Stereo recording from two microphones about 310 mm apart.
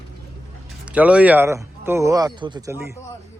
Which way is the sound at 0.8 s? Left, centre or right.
Centre.